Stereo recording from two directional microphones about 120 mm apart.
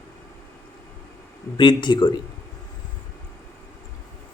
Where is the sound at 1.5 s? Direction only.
40° left (ahead or behind).